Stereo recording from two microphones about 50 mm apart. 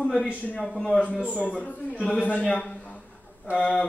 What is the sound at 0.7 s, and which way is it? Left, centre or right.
Speech, centre.